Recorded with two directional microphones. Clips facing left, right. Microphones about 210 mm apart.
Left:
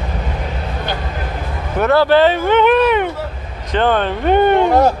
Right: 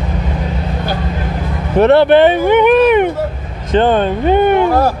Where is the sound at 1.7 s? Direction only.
25° right (ahead or behind).